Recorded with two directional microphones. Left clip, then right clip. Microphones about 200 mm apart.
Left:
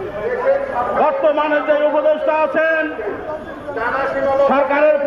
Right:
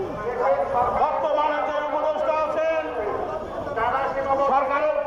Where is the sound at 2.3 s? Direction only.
45° left (ahead or behind).